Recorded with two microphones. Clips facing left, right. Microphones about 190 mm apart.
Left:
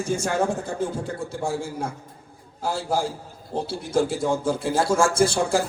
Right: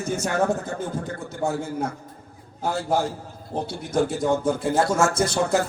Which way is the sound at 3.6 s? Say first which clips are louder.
Even; 30° left (ahead or behind).